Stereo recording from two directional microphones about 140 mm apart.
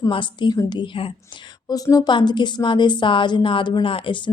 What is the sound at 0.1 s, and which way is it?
Speech, 35° left (ahead or behind).